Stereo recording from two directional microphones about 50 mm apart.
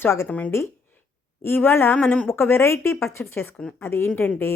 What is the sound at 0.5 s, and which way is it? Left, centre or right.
Speech, left.